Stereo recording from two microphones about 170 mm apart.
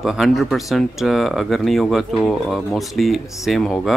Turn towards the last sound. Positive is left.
turn(degrees=0)  # may be behind; listen again after turning